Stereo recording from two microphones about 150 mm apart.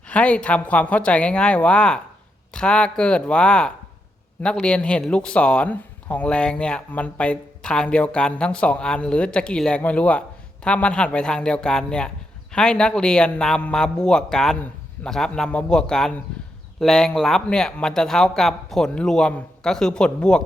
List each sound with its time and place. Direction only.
0.1 s a man's voice: 10° left (ahead or behind)